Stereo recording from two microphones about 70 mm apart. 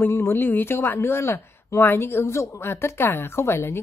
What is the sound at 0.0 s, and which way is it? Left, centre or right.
Speech, left.